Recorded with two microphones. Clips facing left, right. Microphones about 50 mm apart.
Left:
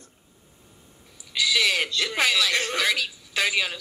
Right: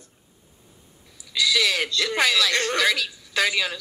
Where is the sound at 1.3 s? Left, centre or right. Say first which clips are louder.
Right 1 dB; centre.